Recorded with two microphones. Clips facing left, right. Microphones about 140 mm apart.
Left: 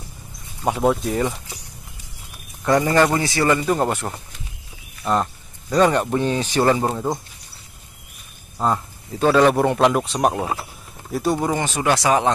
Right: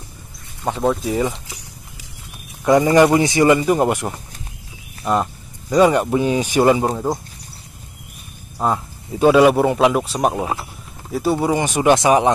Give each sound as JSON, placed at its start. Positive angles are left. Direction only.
{"t": 0.7, "sound": "speech", "side_deg": 5}
{"t": 2.6, "sound": "a man's voice", "side_deg": -15}
{"t": 8.5, "sound": "a man's voice", "side_deg": -10}